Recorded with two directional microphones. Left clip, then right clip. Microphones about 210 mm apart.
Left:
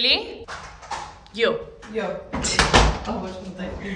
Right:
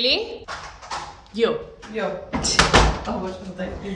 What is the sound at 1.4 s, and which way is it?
Speech, 20° right (ahead or behind).